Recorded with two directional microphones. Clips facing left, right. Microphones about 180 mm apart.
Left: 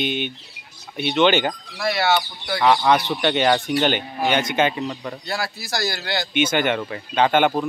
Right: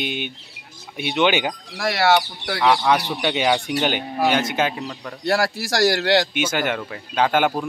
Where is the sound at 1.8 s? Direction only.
80° right.